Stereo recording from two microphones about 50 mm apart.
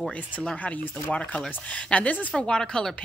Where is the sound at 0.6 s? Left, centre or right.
Left.